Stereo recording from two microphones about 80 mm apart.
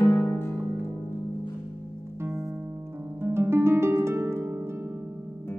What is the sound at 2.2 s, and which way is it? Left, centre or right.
Music, right.